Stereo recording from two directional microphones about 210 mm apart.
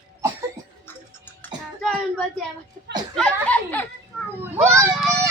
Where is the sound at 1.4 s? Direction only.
Centre (ahead or behind).